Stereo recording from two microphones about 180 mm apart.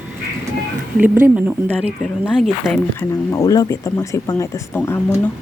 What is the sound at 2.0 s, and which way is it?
Speech, 5° left (ahead or behind).